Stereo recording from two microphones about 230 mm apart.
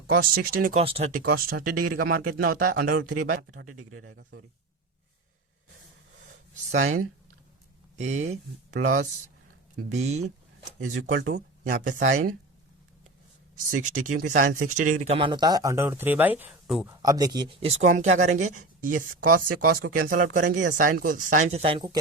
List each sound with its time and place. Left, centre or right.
0.1 s speech: right
1.2 s speech: right
3.0 s speech: right
3.2 s speech: right
4.0 s speech: right
6.7 s speech: right
7.9 s speech: right
11.3 s speech: right
13.9 s speech: right; by 16.9 s centre
17.0 s speech: centre